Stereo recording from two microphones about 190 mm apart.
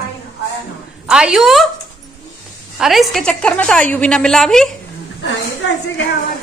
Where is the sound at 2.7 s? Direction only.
Centre (ahead or behind).